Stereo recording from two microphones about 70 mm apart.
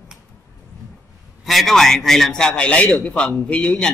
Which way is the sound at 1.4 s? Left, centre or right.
Centre.